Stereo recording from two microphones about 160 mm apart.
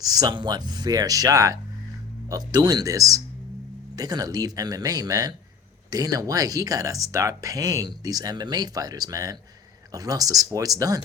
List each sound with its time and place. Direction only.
0.0 s speech: 25° right (ahead or behind)